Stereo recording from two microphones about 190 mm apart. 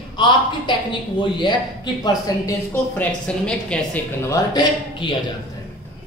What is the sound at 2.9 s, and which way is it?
Speech, 5° left (ahead or behind).